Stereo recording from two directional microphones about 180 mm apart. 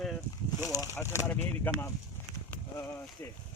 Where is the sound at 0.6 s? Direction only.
20° left (ahead or behind).